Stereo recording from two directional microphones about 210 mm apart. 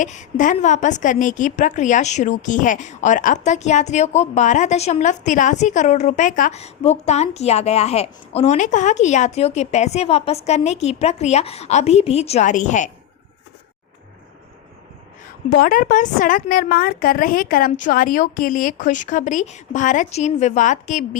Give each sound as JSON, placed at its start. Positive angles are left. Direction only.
{"t": 0.0, "sound": "a woman's voice", "side_deg": 35}
{"t": 15.4, "sound": "a woman's voice", "side_deg": 40}